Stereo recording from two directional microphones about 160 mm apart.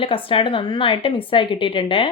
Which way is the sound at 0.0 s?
35° left (ahead or behind).